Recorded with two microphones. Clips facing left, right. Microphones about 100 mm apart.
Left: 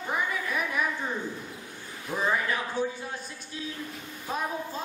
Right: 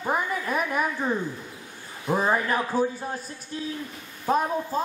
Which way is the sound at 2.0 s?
40° right (ahead or behind).